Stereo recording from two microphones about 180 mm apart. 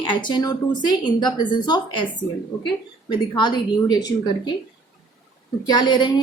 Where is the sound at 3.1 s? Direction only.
25° left (ahead or behind).